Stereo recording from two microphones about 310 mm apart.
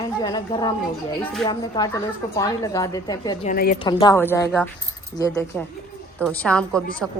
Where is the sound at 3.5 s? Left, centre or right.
Left.